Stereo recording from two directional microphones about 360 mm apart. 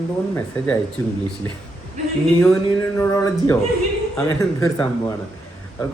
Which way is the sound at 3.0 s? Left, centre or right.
Centre.